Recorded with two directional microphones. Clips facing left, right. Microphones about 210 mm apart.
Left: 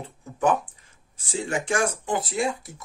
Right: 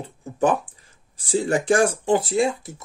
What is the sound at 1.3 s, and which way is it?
Speech, 35° right (ahead or behind).